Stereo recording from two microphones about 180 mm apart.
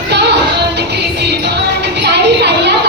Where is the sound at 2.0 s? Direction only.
70° right (ahead or behind).